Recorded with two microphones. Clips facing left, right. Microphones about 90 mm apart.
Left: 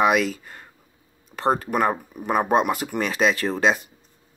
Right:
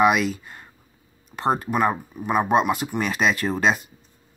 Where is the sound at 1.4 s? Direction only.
40° left (ahead or behind).